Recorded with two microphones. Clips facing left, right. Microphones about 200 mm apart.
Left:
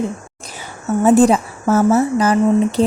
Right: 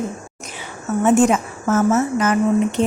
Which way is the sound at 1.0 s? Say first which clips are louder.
Left 3 dB; 35° left (ahead or behind).